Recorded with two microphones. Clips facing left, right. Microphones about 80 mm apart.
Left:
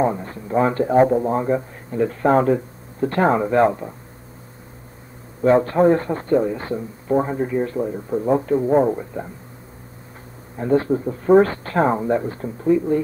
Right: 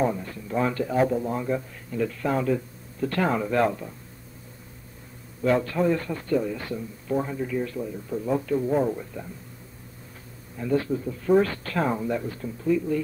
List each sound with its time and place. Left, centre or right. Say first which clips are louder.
0.0 s a man's voice: left 5 dB; left
5.4 s a man's voice: left 8 dB; left
10.6 s a man's voice: left 7 dB; left